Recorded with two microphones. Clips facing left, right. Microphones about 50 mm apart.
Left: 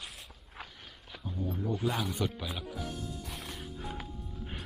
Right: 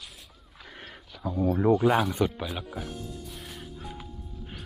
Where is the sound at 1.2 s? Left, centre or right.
Right.